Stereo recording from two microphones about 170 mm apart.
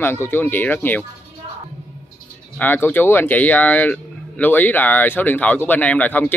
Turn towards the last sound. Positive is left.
turn(degrees=10)  # may be behind; listen again after turning